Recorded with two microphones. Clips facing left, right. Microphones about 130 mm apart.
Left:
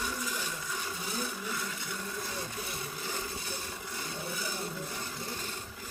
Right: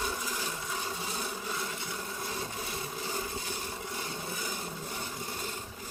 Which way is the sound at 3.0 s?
25° right (ahead or behind).